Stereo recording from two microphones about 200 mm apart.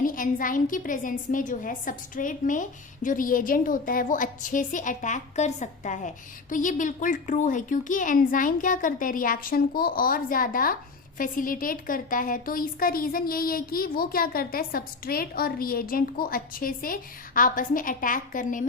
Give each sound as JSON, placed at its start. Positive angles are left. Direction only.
{"t": 0.0, "sound": "a woman's voice", "side_deg": 45}